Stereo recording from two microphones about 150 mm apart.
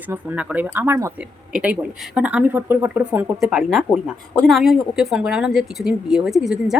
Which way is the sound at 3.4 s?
Centre (ahead or behind).